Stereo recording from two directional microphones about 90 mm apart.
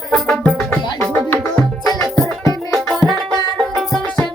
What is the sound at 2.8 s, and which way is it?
Music, 5° left (ahead or behind).